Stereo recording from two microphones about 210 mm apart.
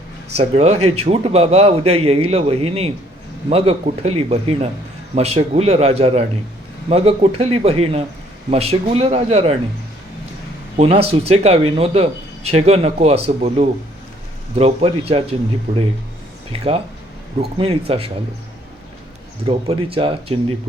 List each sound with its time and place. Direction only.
0.3 s speech: 30° right (ahead or behind)
10.8 s speech: 30° right (ahead or behind)
16.5 s speech: 25° right (ahead or behind)
19.5 s speech: 25° right (ahead or behind)